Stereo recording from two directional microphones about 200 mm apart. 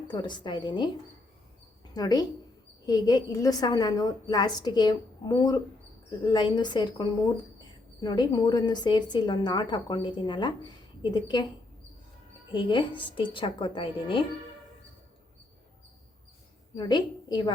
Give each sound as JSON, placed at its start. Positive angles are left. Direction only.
{"t": 0.1, "sound": "a woman's voice", "side_deg": 20}
{"t": 1.9, "sound": "a woman's voice", "side_deg": 20}
{"t": 12.5, "sound": "a woman's voice", "side_deg": 25}
{"t": 16.7, "sound": "a woman's voice", "side_deg": 20}